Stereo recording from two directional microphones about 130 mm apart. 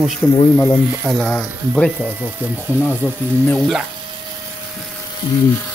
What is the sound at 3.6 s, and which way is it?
Speech, centre (ahead or behind).